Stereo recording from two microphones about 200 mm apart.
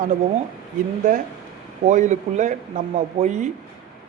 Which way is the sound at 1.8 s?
35° right (ahead or behind).